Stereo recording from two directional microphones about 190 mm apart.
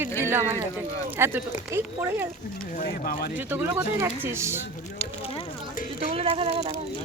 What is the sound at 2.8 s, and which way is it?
Speech, 50° left (ahead or behind).